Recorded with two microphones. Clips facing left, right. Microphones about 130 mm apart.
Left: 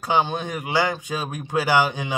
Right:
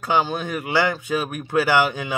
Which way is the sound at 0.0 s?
20° left (ahead or behind).